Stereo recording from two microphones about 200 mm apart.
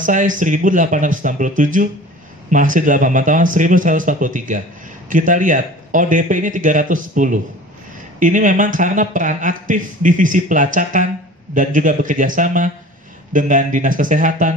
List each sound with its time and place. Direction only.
0.0 s speech: 40° right (ahead or behind)